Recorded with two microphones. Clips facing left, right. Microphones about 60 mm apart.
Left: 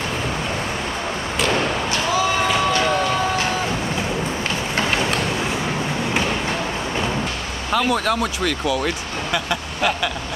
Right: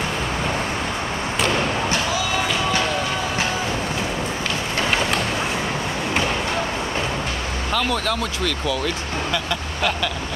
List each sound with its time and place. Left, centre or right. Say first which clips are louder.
7.7 s speech: left 4 dB; centre